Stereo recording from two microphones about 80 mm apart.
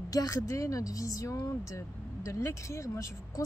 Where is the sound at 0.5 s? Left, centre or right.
Left.